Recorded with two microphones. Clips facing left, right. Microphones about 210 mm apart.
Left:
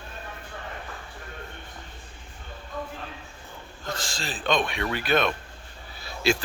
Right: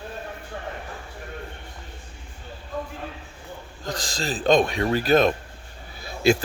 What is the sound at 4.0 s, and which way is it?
Speech, 40° right (ahead or behind).